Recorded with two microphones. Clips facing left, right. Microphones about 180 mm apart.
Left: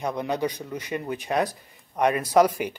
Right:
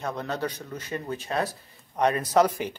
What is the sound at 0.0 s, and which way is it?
A man's voice, 15° left (ahead or behind).